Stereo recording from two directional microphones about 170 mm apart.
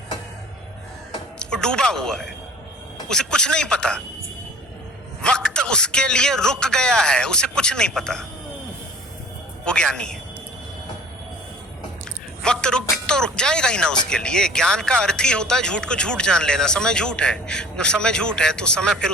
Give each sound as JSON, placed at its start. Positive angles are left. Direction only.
{"t": 1.4, "sound": "speech", "side_deg": 5}
{"t": 5.2, "sound": "speech", "side_deg": 5}
{"t": 9.6, "sound": "speech", "side_deg": 5}
{"t": 12.4, "sound": "speech", "side_deg": 5}